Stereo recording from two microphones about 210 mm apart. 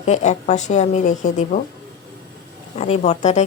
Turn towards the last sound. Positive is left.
turn(degrees=35)  # may be behind; listen again after turning